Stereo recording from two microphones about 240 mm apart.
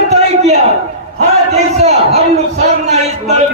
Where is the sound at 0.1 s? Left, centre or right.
Right.